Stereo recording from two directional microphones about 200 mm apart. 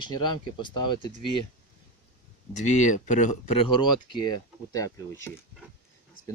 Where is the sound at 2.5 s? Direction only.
35° left (ahead or behind).